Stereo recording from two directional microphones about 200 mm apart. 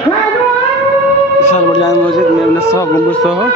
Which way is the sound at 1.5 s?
30° left (ahead or behind).